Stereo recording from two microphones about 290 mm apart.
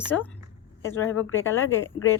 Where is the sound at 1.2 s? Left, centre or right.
Left.